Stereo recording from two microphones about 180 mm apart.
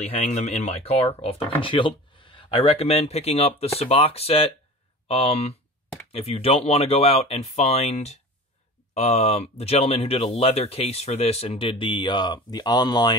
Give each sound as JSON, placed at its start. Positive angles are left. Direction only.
{"t": 0.0, "sound": "speech", "side_deg": 35}